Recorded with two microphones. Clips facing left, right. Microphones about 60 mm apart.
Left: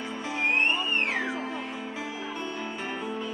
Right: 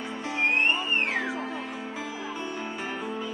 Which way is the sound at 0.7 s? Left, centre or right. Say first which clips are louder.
Right 1 dB; right.